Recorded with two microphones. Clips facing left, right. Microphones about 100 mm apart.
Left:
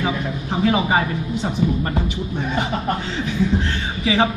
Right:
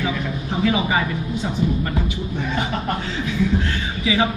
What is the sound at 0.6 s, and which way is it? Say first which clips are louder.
Speech: left 2 dB; 35° left (ahead or behind).